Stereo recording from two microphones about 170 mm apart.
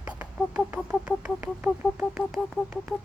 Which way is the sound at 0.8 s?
5° right (ahead or behind).